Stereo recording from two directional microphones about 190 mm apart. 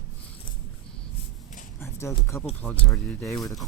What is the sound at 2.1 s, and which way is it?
Speech, 15° left (ahead or behind).